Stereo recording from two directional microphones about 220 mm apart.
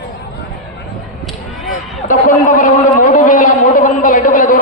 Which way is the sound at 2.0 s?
35° left (ahead or behind).